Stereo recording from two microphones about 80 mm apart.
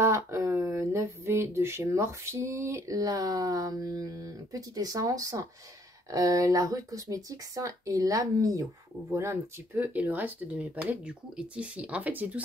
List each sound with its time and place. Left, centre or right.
0.0 s speech: right
9.9 s speech: right